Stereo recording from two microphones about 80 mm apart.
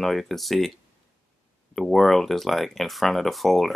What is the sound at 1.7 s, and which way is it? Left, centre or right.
Speech, centre.